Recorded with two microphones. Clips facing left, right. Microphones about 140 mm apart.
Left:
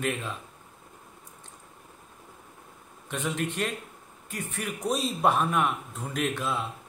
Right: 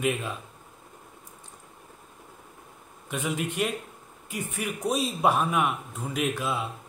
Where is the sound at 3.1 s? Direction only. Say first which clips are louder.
Right 1 dB; 5° right (ahead or behind).